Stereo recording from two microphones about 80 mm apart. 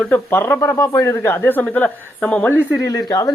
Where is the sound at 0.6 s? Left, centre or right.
Left.